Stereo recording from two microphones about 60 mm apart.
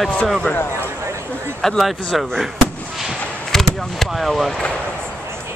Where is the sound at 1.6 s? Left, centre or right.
Centre.